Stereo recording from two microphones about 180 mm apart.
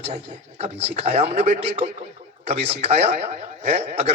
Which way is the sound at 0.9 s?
35° right (ahead or behind).